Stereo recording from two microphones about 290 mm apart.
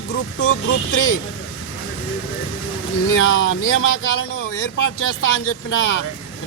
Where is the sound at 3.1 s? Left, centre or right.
Left.